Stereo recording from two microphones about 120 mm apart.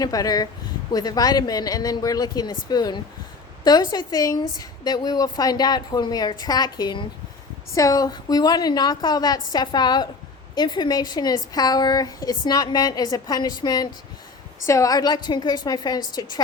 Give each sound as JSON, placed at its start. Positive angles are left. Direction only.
{"t": 0.0, "sound": "a woman's voice", "side_deg": 30}